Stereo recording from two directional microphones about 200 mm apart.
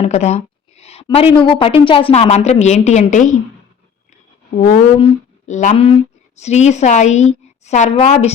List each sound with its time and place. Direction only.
0.0 s a sound: 35° left (ahead or behind)
1.0 s a woman's voice: 30° left (ahead or behind)
4.5 s a woman's voice: 30° left (ahead or behind)